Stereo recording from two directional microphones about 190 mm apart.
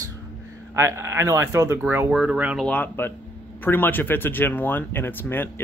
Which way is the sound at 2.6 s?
10° left (ahead or behind).